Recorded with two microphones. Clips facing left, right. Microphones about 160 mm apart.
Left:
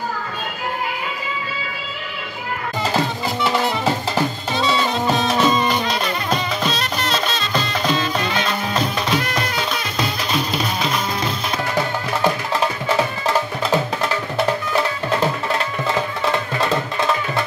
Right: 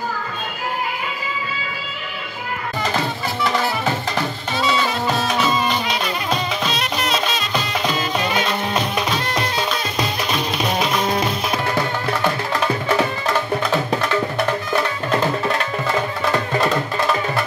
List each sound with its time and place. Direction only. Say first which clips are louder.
5.1 s music: left 4 dB; 5° right (ahead or behind)